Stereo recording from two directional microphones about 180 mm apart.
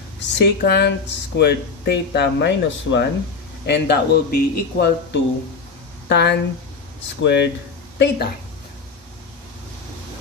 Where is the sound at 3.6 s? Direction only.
65° left (ahead or behind).